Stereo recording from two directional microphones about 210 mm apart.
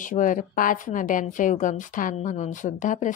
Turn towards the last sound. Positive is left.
turn(degrees=35)  # may be behind; listen again after turning